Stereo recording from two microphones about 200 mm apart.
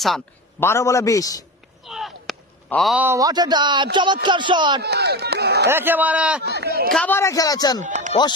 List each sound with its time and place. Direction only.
0.6 s speech: 15° left (ahead or behind)
1.8 s a man's voice: centre (ahead or behind); by 4.8 s 25° right (ahead or behind)
4.8 s speech: 55° right (ahead or behind)
5.6 s a man's voice: 10° right (ahead or behind)
6.4 s speech: 55° right (ahead or behind)
6.9 s speech: 10° left (ahead or behind)
7.9 s music: 40° right (ahead or behind)